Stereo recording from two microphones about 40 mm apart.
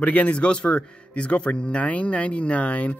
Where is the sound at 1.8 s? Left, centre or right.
Left.